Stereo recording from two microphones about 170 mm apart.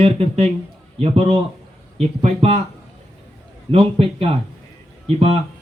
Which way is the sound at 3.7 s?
35° right (ahead or behind).